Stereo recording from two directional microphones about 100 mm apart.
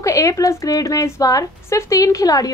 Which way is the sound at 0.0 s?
35° left (ahead or behind).